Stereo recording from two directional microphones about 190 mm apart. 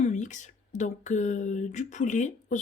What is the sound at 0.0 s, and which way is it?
Speech, 40° left (ahead or behind).